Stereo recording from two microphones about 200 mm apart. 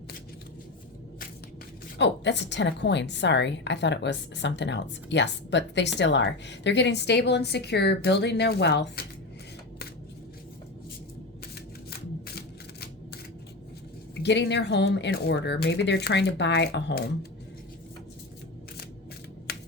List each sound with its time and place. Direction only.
2.0 s a woman's voice: 60° left (ahead or behind)
14.2 s a woman's voice: 60° left (ahead or behind)
19.5 s typing: 50° left (ahead or behind)